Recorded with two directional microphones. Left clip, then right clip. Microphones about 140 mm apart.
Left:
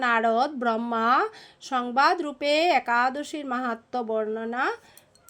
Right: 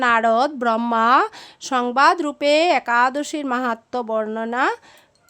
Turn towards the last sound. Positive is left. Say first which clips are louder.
# right 6 dB
turn(degrees=-35)  # may be behind; listen again after turning